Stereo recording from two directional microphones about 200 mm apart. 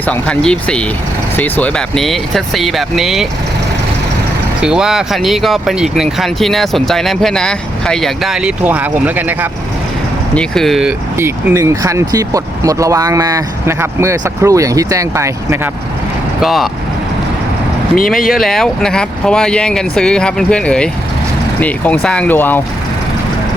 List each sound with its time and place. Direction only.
0.1 s speech: 5° left (ahead or behind)
4.6 s speech: 5° right (ahead or behind)
10.3 s speech: centre (ahead or behind); by 15.7 s 15° right (ahead or behind)
16.4 s speech: centre (ahead or behind)
17.9 s speech: 45° left (ahead or behind)
18.3 s speech: centre (ahead or behind)
22.0 s speech: 5° left (ahead or behind)